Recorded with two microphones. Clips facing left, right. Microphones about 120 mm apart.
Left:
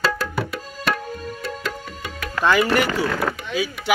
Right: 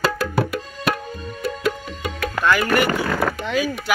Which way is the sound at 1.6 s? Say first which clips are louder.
Right 6 dB; 15° right (ahead or behind).